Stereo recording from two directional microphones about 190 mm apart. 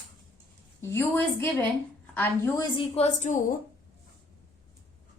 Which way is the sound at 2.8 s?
35° left (ahead or behind).